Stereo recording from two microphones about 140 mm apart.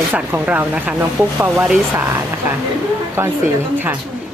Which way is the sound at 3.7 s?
15° right (ahead or behind).